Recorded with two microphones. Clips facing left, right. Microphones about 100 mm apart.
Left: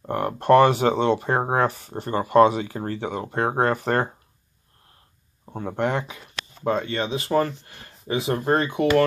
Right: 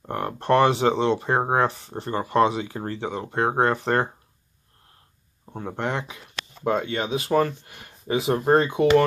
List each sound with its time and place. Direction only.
0.0 s speech: 5° left (ahead or behind)
5.6 s speech: centre (ahead or behind)
6.6 s speech: 10° right (ahead or behind)